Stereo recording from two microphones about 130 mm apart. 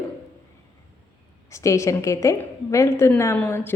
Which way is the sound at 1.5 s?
25° left (ahead or behind).